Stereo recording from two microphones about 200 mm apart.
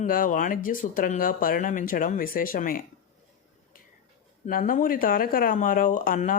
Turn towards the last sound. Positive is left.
turn(degrees=40)  # may be behind; listen again after turning